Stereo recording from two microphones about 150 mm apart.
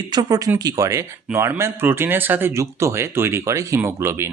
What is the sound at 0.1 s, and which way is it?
Speech, 25° right (ahead or behind).